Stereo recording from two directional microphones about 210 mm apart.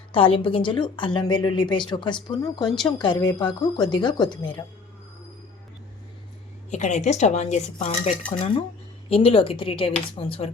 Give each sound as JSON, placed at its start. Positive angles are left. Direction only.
{"t": 0.1, "sound": "a woman's voice", "side_deg": 25}
{"t": 6.7, "sound": "a woman's voice", "side_deg": 35}